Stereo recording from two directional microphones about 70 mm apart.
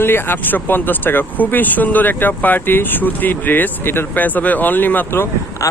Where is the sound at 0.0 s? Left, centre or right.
Left.